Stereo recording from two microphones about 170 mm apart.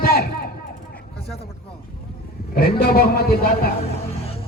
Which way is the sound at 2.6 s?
65° left (ahead or behind).